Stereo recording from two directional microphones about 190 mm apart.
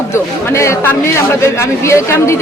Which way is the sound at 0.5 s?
15° left (ahead or behind).